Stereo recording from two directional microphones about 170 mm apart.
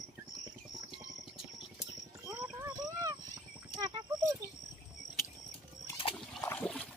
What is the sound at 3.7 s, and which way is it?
Horse, 25° right (ahead or behind).